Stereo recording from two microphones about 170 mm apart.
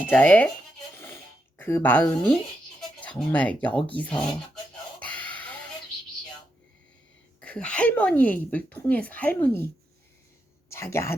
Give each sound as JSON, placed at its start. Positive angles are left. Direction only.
{"t": 0.1, "sound": "speech", "side_deg": 10}
{"t": 0.9, "sound": "a sound", "side_deg": 15}
{"t": 3.0, "sound": "speech", "side_deg": 10}
{"t": 4.9, "sound": "a sound", "side_deg": 10}
{"t": 7.4, "sound": "speech", "side_deg": 5}
{"t": 10.7, "sound": "speech", "side_deg": 15}